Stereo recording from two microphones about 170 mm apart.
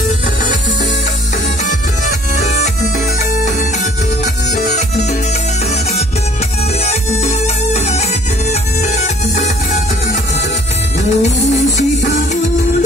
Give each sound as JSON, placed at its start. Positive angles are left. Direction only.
{"t": 2.3, "sound": "music", "side_deg": 40}
{"t": 6.8, "sound": "music", "side_deg": 40}
{"t": 11.0, "sound": "music", "side_deg": 40}